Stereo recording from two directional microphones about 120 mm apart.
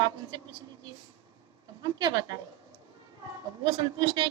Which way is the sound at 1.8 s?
35° right (ahead or behind).